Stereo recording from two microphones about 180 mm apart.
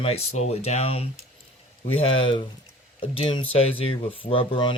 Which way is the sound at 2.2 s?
30° left (ahead or behind).